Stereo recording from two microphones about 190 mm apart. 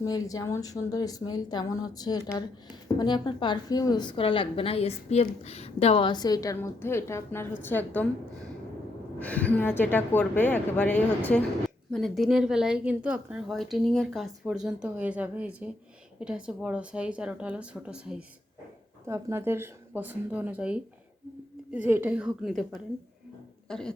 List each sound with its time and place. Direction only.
0.0 s a woman's voice: 20° left (ahead or behind)
9.1 s a woman's voice: 5° left (ahead or behind)